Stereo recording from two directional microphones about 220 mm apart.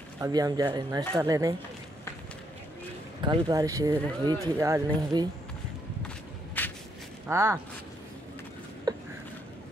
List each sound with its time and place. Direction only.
0.2 s speech: 15° right (ahead or behind)
3.2 s speech: 20° right (ahead or behind)
6.0 s walk: 10° left (ahead or behind)
7.2 s speech: 10° right (ahead or behind)
8.9 s a sound: 15° right (ahead or behind)